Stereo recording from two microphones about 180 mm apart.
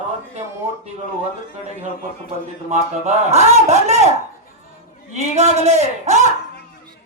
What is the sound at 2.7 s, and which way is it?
Speech, 35° right (ahead or behind).